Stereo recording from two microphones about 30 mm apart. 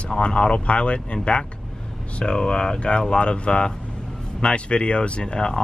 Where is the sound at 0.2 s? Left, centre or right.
Left.